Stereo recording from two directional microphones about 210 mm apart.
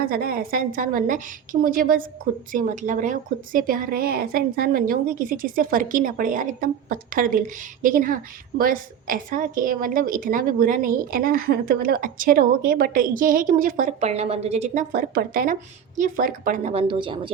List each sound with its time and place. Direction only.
0.0 s a woman's voice: 45° right (ahead or behind); by 17.3 s 25° right (ahead or behind)